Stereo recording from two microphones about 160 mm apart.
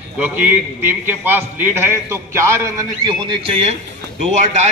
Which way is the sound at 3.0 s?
30° right (ahead or behind).